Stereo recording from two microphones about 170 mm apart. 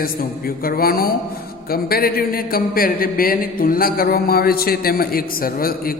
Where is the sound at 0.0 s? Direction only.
60° left (ahead or behind).